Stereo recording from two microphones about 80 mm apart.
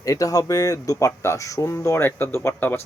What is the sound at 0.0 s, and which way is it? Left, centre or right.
Speech, left.